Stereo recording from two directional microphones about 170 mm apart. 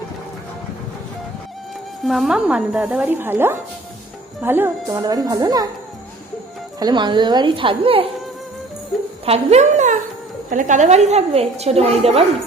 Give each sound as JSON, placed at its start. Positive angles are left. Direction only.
{"t": 2.0, "sound": "a woman's voice", "side_deg": 0}
{"t": 6.7, "sound": "a woman's voice", "side_deg": -25}
{"t": 9.2, "sound": "a sound", "side_deg": -35}
{"t": 10.5, "sound": "a woman's voice", "side_deg": -50}